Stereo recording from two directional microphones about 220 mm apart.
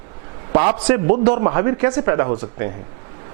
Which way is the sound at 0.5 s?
20° right (ahead or behind).